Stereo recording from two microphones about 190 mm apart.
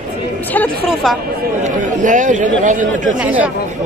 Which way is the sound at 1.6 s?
40° right (ahead or behind).